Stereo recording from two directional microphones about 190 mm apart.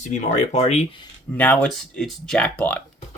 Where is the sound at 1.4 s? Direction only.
5° left (ahead or behind).